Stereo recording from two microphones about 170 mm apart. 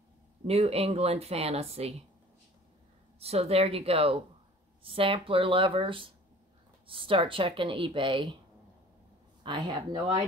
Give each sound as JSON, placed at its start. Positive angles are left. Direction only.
{"t": 0.5, "sound": "speech", "side_deg": -35}
{"t": 3.2, "sound": "speech", "side_deg": -35}
{"t": 9.4, "sound": "speech", "side_deg": -25}